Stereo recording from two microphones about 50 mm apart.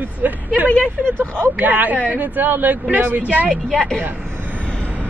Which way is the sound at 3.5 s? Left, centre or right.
Centre.